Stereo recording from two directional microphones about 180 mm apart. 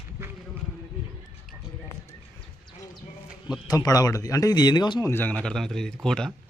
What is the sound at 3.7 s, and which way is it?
Speech, 20° left (ahead or behind).